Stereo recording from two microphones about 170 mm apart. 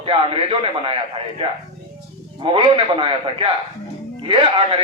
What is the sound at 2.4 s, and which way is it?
Speech, 30° right (ahead or behind).